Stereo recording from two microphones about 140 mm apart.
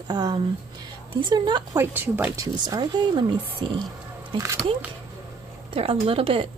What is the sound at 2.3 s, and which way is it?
Speech, 25° right (ahead or behind).